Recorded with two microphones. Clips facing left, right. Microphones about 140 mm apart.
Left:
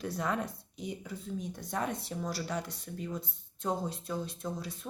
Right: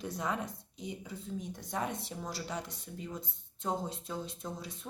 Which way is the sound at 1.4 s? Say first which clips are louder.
Left 2 dB; 20° right (ahead or behind).